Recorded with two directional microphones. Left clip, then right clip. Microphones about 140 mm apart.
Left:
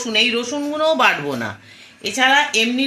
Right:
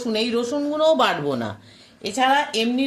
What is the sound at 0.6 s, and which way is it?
Speech, 10° right (ahead or behind).